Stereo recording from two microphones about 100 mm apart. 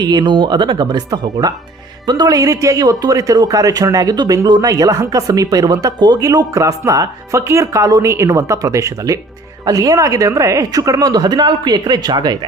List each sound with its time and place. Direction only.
0.0 s speech: 45° right (ahead or behind)